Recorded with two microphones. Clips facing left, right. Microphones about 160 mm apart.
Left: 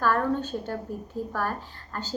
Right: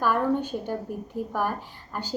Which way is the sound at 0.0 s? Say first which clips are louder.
Right 1 dB; 15° right (ahead or behind).